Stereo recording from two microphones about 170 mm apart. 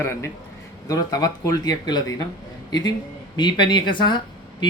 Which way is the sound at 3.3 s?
25° left (ahead or behind).